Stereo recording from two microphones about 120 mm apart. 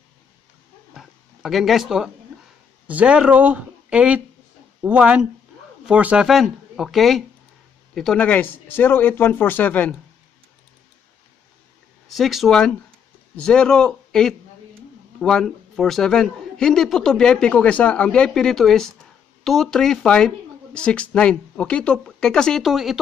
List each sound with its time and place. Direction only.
0.9 s a man's voice: centre (ahead or behind)
12.1 s a man's voice: centre (ahead or behind)